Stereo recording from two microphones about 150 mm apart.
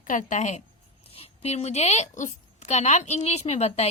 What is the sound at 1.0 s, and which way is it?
A woman's voice, 40° left (ahead or behind).